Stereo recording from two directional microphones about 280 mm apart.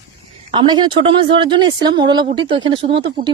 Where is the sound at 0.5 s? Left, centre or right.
Centre.